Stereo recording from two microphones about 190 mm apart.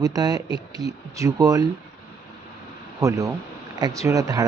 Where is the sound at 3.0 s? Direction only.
15° right (ahead or behind).